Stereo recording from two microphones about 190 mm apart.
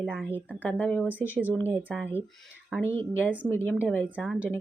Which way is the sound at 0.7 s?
10° left (ahead or behind).